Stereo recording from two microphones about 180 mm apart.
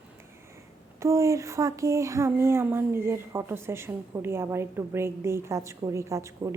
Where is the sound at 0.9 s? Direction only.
15° right (ahead or behind).